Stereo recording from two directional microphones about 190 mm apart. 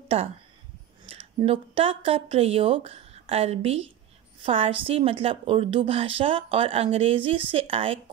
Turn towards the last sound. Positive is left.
turn(degrees=-30)  # may be behind; listen again after turning